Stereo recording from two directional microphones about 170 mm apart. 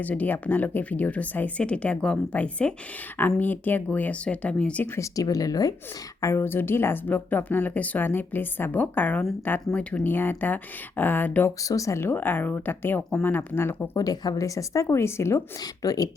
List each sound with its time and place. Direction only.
0.0 s speech: 10° left (ahead or behind)
4.9 s speech: 20° left (ahead or behind)